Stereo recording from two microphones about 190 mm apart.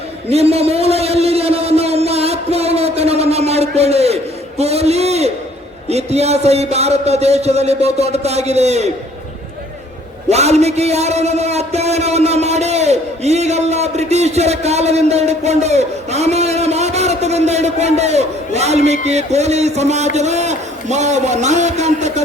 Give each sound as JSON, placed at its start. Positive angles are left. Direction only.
{"t": 0.3, "sound": "a sound", "side_deg": -35}
{"t": 5.9, "sound": "a man's voice", "side_deg": -35}
{"t": 10.2, "sound": "a man's voice", "side_deg": -35}